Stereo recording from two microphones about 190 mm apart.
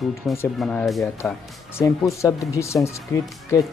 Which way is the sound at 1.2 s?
15° left (ahead or behind).